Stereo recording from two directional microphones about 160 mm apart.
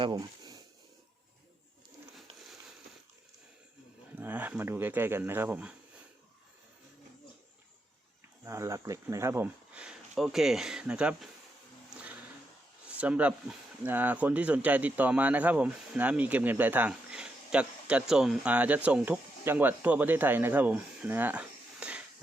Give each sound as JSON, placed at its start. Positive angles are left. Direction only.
{"t": 0.0, "sound": "a sound", "side_deg": -25}
{"t": 4.2, "sound": "speech", "side_deg": -10}
{"t": 8.4, "sound": "speech", "side_deg": -20}
{"t": 13.0, "sound": "speech", "side_deg": -10}